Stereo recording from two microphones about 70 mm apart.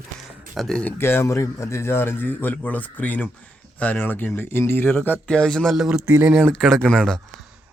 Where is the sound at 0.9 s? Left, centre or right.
Left.